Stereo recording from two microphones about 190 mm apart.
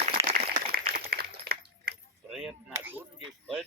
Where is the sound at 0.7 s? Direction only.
50° right (ahead or behind).